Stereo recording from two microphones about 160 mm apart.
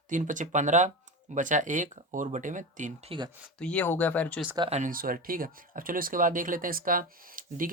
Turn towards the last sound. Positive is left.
turn(degrees=-60)  # may be behind; listen again after turning